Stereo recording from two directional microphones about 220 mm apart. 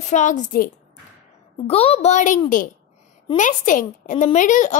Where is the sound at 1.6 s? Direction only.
30° left (ahead or behind).